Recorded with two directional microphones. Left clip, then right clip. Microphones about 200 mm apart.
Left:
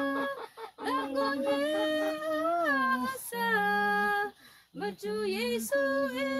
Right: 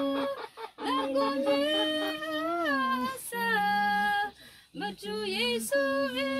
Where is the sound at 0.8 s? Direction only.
45° left (ahead or behind).